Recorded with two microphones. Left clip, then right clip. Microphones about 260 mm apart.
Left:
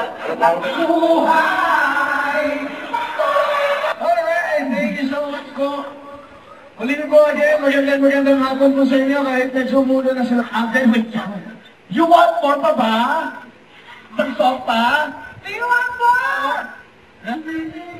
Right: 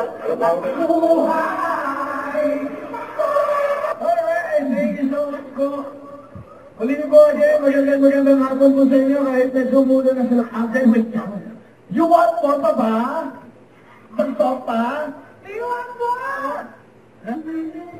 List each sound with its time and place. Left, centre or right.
0.0 s music: centre
6.8 s a man's voice: centre
14.1 s a sound: centre
17.2 s a woman's voice: centre